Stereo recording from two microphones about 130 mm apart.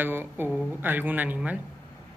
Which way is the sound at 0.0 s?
15° right (ahead or behind).